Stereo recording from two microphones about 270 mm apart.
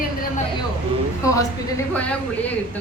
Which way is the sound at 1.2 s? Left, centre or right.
Centre.